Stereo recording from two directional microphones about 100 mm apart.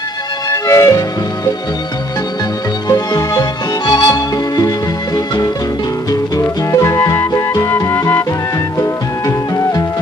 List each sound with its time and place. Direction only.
0.5 s music: 30° left (ahead or behind)
2.9 s music: 40° left (ahead or behind)
9.6 s music: 35° left (ahead or behind)